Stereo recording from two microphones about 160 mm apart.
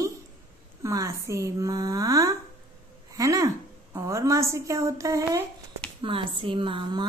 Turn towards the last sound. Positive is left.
turn(degrees=-30)  # may be behind; listen again after turning